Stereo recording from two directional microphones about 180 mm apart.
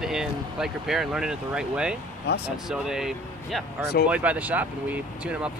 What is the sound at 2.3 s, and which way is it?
Speech, 70° left (ahead or behind).